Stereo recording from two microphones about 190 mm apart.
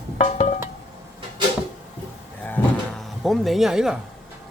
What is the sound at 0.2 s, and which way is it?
Music, 40° left (ahead or behind).